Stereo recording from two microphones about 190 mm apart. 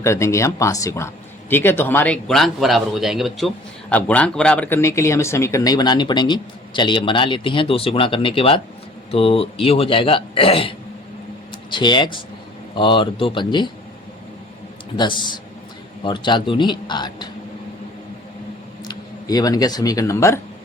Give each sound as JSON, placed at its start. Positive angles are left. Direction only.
{"t": 0.0, "sound": "speech", "side_deg": 15}
{"t": 14.9, "sound": "speech", "side_deg": 25}
{"t": 18.9, "sound": "speech", "side_deg": 20}